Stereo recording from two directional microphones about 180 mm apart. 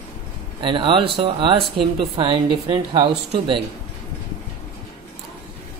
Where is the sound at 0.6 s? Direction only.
25° right (ahead or behind).